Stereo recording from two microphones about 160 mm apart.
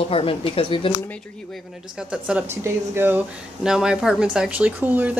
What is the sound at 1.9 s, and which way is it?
Speech, 5° right (ahead or behind).